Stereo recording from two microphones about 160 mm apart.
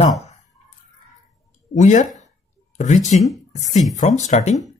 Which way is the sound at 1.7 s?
50° left (ahead or behind).